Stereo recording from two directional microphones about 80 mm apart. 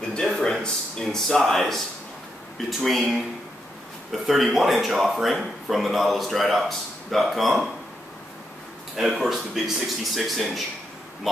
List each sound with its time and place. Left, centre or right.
0.2 s speech: centre
9.1 s speech: centre